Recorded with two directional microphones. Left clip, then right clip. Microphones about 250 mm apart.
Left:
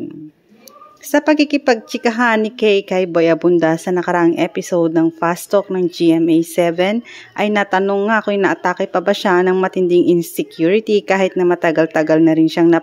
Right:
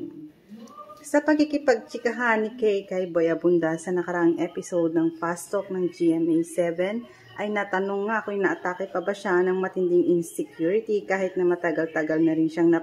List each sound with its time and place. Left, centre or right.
1.1 s a woman's voice: left